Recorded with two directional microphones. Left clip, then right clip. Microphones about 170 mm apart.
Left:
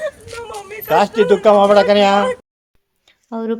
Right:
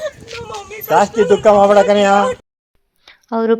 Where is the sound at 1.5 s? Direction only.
25° right (ahead or behind).